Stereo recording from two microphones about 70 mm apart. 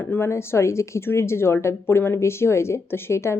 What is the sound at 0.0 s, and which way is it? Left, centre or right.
A woman's voice, left.